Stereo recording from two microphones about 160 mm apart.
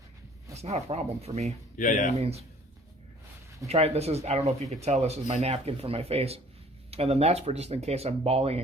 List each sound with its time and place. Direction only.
0.5 s speech: 40° right (ahead or behind)
1.7 s speech: 55° left (ahead or behind)
2.1 s speech: 40° right (ahead or behind)
3.7 s speech: 40° right (ahead or behind)